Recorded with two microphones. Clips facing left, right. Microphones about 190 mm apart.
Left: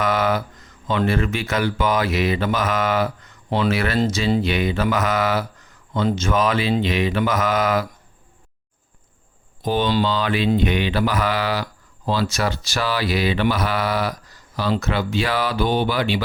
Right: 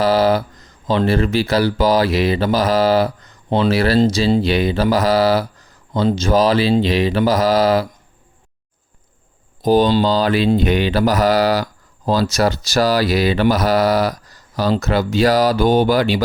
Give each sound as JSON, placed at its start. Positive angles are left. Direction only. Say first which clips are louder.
{"t": 0.0, "sound": "speech", "louder": "right 6 dB", "side_deg": -30}
{"t": 9.6, "sound": "speech", "louder": "right 6 dB", "side_deg": -40}